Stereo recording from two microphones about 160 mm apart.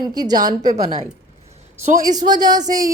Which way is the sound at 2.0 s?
25° right (ahead or behind).